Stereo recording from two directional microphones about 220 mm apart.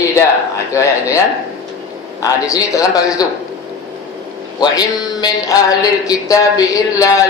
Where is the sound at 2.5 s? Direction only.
15° left (ahead or behind).